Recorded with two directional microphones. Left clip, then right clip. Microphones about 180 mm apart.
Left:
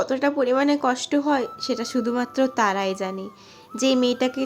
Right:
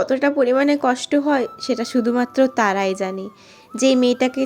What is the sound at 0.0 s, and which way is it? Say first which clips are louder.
Speech: right 4 dB; 15° right (ahead or behind).